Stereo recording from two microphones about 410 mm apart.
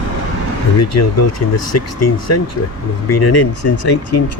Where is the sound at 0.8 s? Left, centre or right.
Left.